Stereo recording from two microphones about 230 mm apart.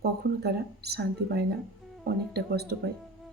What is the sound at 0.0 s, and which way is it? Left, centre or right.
A woman's voice, right.